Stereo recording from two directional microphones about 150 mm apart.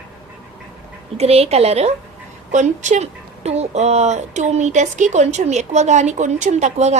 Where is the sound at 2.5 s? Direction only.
55° right (ahead or behind).